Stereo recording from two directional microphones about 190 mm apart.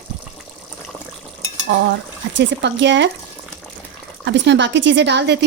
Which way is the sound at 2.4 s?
65° right (ahead or behind).